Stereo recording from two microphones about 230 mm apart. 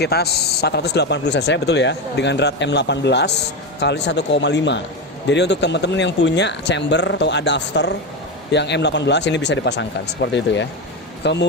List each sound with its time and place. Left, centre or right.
0.0 s a man's voice: left